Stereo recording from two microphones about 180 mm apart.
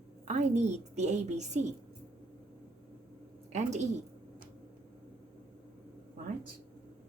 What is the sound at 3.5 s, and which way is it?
Speech, 40° right (ahead or behind).